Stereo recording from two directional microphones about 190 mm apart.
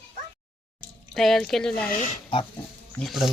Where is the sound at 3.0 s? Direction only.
Centre (ahead or behind).